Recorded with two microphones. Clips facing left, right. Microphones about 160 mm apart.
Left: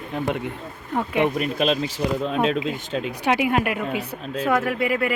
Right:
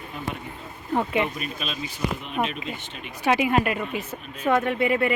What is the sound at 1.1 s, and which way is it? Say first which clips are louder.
Speech: left 5 dB; 65° left (ahead or behind).